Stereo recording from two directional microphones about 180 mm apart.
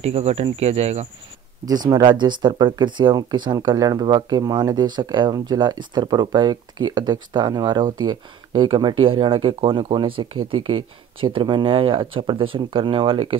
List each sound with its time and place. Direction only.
0.0 s speech: 35° right (ahead or behind)
1.7 s speech: 25° right (ahead or behind)